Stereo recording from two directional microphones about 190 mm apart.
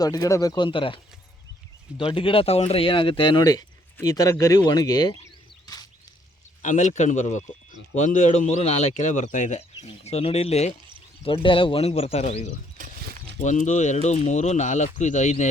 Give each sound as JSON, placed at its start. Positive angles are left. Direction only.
{"t": 0.0, "sound": "speech", "side_deg": 20}
{"t": 2.1, "sound": "speech", "side_deg": 30}
{"t": 6.6, "sound": "speech", "side_deg": 40}
{"t": 12.7, "sound": "a sound", "side_deg": -45}
{"t": 13.4, "sound": "speech", "side_deg": 40}